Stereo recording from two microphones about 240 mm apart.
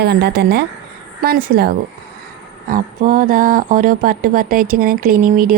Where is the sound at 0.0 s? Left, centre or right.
Right.